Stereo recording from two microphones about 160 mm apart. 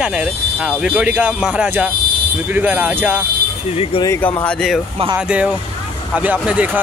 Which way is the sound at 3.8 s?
35° left (ahead or behind).